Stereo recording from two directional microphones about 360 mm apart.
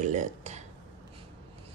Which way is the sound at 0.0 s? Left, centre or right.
Centre.